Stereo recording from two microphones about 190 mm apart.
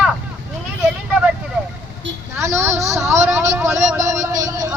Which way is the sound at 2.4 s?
15° right (ahead or behind).